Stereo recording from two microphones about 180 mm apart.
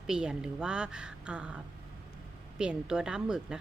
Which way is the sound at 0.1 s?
5° right (ahead or behind).